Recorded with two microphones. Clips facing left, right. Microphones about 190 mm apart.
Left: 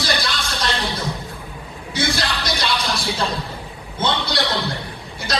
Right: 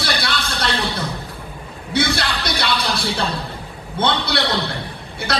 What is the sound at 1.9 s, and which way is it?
Music, 60° right (ahead or behind).